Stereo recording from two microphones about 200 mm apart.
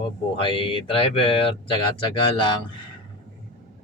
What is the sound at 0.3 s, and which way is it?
Speech, 25° left (ahead or behind).